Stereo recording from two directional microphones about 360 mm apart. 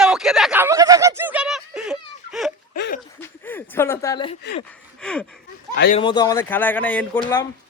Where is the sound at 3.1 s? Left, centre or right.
Centre.